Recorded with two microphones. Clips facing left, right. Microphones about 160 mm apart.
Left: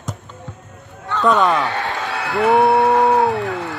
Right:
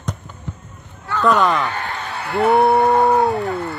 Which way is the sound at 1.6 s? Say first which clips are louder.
Left 3 dB; 80° left.